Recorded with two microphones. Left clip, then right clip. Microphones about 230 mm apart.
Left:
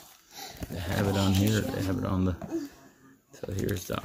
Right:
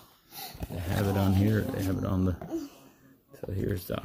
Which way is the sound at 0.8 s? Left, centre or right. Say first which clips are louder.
Left 1 dB; centre.